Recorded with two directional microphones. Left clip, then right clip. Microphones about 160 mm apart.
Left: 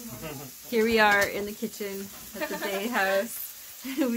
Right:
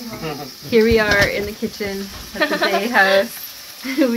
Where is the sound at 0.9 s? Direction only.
55° left (ahead or behind).